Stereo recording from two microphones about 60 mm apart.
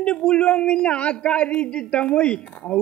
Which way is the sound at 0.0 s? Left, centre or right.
Centre.